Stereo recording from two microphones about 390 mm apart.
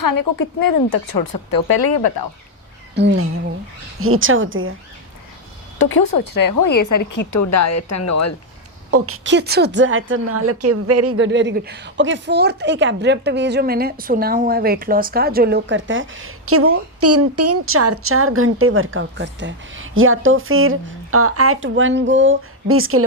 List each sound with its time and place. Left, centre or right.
0.0 s speech: left
2.9 s a woman's voice: right
5.9 s speech: left
8.9 s a woman's voice: right